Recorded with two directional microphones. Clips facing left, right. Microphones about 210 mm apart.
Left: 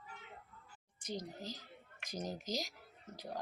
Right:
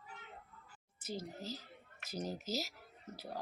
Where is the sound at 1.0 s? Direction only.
5° right (ahead or behind).